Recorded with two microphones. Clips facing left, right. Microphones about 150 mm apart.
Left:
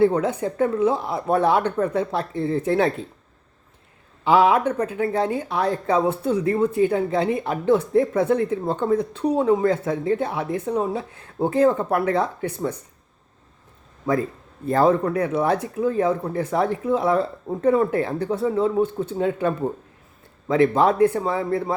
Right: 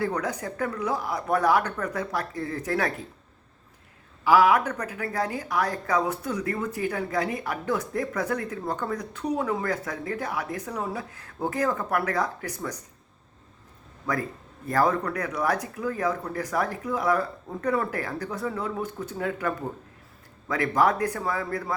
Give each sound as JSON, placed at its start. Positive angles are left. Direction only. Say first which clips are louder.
{"t": 0.0, "sound": "a woman's voice", "louder": "left 9 dB", "side_deg": 25}
{"t": 4.2, "sound": "a woman's voice", "louder": "left 3 dB", "side_deg": 25}
{"t": 14.1, "sound": "a woman's voice", "louder": "left 7 dB", "side_deg": 25}